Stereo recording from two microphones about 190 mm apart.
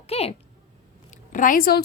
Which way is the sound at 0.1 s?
30° left (ahead or behind).